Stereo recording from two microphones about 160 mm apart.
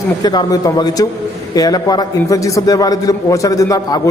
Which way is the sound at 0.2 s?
25° left (ahead or behind).